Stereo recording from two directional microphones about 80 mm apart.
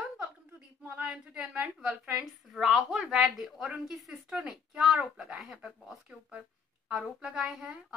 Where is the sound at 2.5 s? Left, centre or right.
Centre.